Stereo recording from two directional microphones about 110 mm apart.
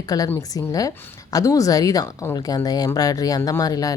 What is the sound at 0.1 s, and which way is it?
Speech, 35° left (ahead or behind).